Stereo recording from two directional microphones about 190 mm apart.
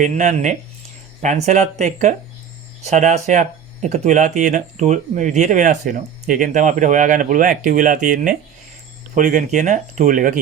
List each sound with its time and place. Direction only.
0.0 s speech: 40° right (ahead or behind)